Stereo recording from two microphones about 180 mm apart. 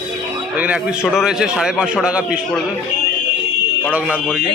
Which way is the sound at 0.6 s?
5° right (ahead or behind).